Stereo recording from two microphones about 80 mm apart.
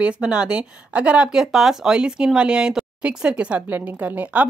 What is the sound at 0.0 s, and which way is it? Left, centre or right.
Speech, centre.